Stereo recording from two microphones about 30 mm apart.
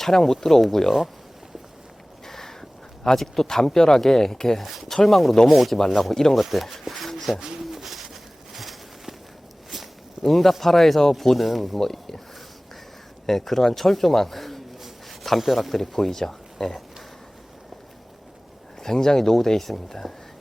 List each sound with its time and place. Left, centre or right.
0.0 s speech: centre
2.2 s a sound: centre
3.1 s speech: centre
5.0 s speech: centre
7.6 s bird: centre
9.6 s a sound: centre
10.6 s speech: centre
11.8 s speech: centre
13.2 s speech: centre
15.8 s speech: centre
18.8 s speech: centre